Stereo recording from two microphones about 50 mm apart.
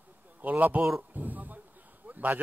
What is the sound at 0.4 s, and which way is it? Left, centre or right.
A man's voice, right.